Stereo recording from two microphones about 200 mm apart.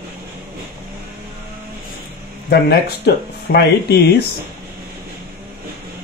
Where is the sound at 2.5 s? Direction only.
50° left (ahead or behind).